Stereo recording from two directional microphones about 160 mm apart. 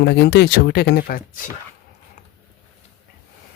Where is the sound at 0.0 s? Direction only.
90° left; by 1.5 s 60° left (ahead or behind).